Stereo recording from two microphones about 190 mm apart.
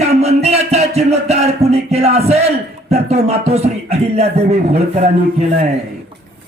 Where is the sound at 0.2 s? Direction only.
35° right (ahead or behind).